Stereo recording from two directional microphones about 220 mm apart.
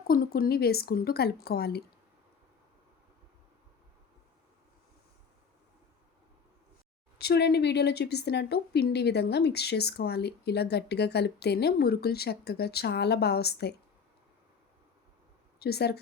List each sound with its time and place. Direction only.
0.1 s a woman's voice: 40° left (ahead or behind)
7.2 s a woman's voice: 50° left (ahead or behind)
15.5 s a woman's voice: 45° left (ahead or behind)